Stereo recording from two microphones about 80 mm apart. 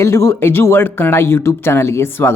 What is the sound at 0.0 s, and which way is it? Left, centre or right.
Speech, left.